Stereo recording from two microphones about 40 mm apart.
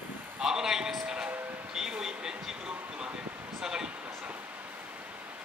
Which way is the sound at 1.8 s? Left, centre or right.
Centre.